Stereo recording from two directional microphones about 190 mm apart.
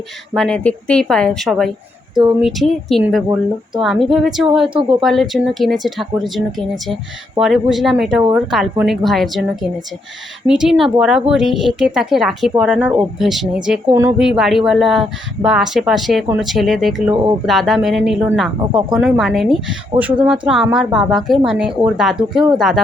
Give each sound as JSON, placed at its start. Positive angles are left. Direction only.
{"t": 0.3, "sound": "speech", "side_deg": 5}
{"t": 4.7, "sound": "speech", "side_deg": -30}
{"t": 4.9, "sound": "speech", "side_deg": 0}